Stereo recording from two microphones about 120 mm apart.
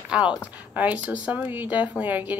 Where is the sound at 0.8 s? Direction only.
15° right (ahead or behind).